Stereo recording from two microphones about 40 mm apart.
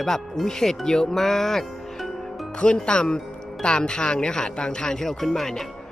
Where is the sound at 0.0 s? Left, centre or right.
Centre.